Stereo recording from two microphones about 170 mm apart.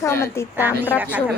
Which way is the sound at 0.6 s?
10° right (ahead or behind).